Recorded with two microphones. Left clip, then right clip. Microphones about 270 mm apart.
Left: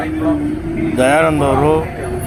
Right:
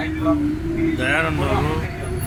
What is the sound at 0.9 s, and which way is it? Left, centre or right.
Speech, centre.